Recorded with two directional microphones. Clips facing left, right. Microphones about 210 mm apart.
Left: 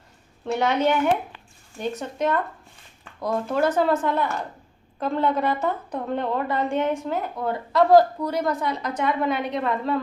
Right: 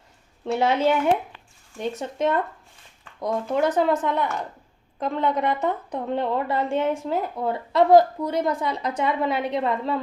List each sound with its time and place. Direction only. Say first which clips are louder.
0.6 s a woman's voice: right 1 dB; 30° right (ahead or behind)